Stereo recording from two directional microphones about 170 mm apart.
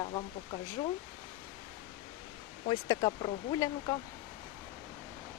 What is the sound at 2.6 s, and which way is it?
Speech, 25° left (ahead or behind).